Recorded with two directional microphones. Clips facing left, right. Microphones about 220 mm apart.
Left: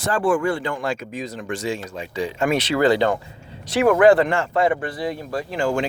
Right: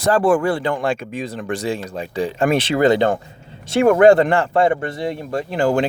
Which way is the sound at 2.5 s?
25° right (ahead or behind).